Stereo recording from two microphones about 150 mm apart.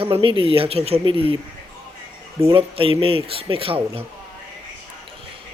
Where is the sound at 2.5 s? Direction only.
40° right (ahead or behind).